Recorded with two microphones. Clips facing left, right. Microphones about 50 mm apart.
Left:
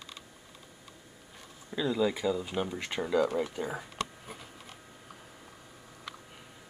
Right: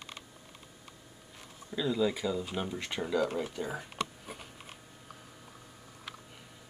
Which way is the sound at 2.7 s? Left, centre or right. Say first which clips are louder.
Left 3 dB; centre.